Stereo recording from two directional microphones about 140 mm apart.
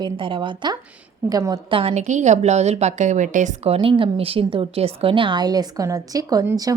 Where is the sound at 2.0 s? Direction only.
60° right (ahead or behind).